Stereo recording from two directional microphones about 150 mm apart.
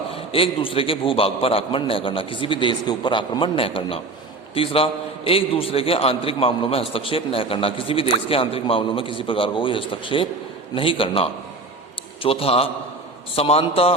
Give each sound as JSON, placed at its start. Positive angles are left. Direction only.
{"t": 0.1, "sound": "a man's voice", "side_deg": 40}